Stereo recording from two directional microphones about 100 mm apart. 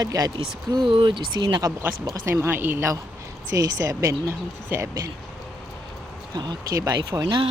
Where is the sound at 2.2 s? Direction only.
25° right (ahead or behind).